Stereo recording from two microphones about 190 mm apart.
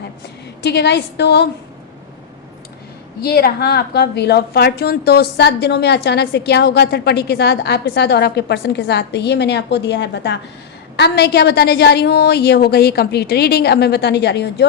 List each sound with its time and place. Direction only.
0.6 s a woman's voice: 65° left (ahead or behind)
3.2 s a woman's voice: 55° left (ahead or behind)